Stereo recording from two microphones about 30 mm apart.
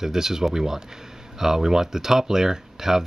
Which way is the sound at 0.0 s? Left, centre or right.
Centre.